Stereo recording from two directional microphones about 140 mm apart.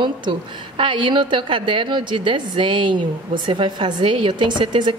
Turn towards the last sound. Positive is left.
turn(degrees=-35)  # may be behind; listen again after turning